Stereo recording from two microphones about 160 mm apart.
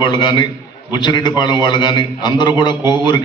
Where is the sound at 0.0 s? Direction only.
25° left (ahead or behind).